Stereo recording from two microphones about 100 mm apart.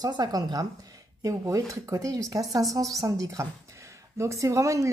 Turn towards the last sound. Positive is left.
turn(degrees=-30)  # may be behind; listen again after turning